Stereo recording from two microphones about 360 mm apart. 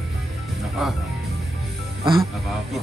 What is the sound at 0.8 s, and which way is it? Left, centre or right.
Speech, centre.